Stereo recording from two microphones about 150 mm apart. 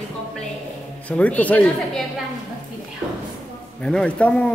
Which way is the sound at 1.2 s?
10° left (ahead or behind).